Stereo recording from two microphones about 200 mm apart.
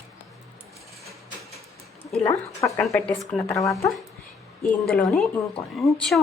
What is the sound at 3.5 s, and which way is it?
Speech, 15° left (ahead or behind).